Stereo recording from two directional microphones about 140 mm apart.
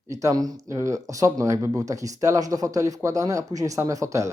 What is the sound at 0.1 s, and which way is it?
Speech, 20° right (ahead or behind).